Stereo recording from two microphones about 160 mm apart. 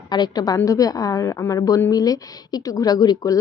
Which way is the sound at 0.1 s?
25° left (ahead or behind).